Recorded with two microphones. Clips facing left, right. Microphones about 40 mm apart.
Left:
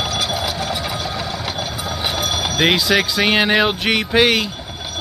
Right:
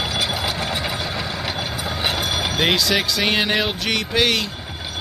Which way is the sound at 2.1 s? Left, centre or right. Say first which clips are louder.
Left 2 dB; centre.